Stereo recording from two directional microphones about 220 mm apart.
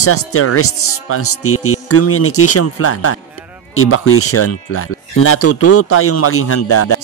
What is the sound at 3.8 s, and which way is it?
Speech, 70° left (ahead or behind).